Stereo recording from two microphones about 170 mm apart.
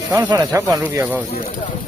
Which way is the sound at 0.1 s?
25° right (ahead or behind).